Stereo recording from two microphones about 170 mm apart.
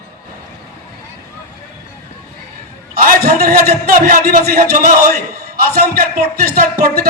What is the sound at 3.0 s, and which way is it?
A man's voice, 60° right (ahead or behind).